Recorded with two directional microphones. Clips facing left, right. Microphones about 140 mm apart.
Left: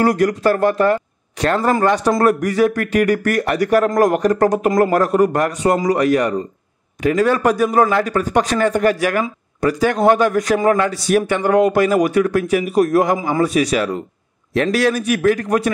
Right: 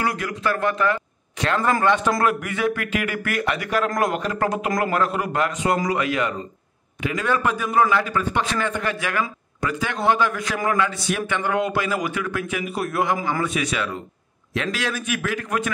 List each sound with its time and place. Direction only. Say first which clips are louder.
0.0 s a man's voice: left 10 dB; 40° left (ahead or behind)